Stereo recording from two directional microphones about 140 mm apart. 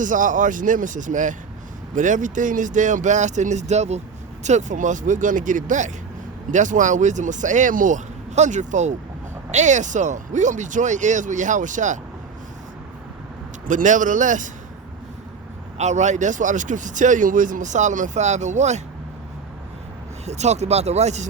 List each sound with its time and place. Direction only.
0.0 s speech: 65° right (ahead or behind)
13.7 s speech: 65° right (ahead or behind)
15.8 s speech: 55° right (ahead or behind)
20.2 s speech: 55° right (ahead or behind)